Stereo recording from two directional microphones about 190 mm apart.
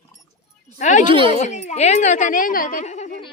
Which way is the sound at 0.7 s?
40° left (ahead or behind).